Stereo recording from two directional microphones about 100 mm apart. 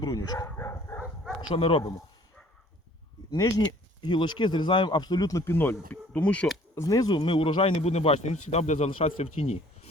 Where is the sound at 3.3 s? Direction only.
40° left (ahead or behind).